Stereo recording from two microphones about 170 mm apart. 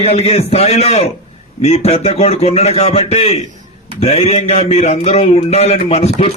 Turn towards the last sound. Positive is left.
turn(degrees=35)  # may be behind; listen again after turning